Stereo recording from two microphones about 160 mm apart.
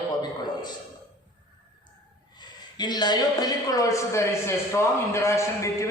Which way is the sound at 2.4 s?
25° left (ahead or behind).